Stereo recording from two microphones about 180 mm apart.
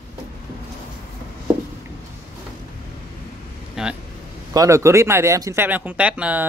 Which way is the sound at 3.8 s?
5° right (ahead or behind).